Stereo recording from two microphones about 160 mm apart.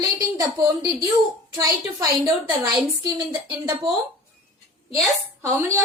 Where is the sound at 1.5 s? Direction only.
20° right (ahead or behind).